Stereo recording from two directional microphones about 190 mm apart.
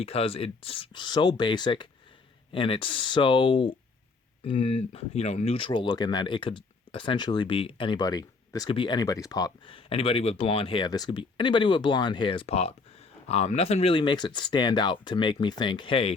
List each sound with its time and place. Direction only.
0.0 s speech: 30° left (ahead or behind)